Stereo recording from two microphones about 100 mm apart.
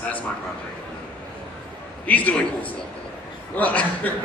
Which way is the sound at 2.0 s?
15° left (ahead or behind).